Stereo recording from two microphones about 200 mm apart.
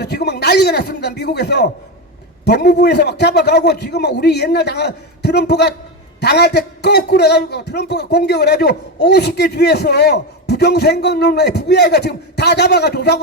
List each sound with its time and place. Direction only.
0.0 s a man's voice: 55° left (ahead or behind)